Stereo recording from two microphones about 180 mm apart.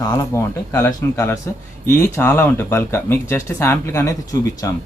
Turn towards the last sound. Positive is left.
turn(degrees=20)  # may be behind; listen again after turning